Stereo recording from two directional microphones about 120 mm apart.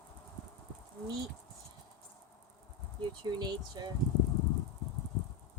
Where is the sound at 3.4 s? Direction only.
35° right (ahead or behind).